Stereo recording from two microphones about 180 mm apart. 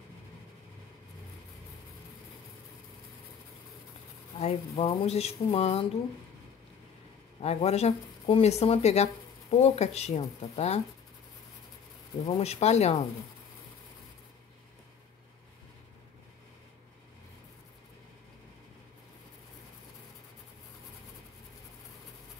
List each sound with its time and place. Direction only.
4.4 s speech: 35° left (ahead or behind)
7.4 s speech: 35° left (ahead or behind)
12.3 s speech: 35° left (ahead or behind)